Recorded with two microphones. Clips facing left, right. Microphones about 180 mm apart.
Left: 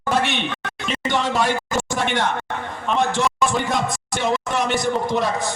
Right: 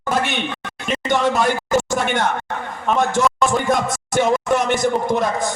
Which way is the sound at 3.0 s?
45° right (ahead or behind).